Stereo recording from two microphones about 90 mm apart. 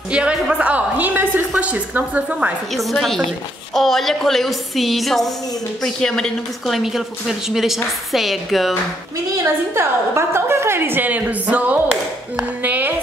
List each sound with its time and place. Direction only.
0.1 s a woman's voice: 10° right (ahead or behind)
2.7 s speech: centre (ahead or behind)
9.4 s a woman's voice: 30° right (ahead or behind)